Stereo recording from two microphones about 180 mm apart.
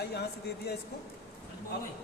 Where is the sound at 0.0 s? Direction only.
65° left (ahead or behind).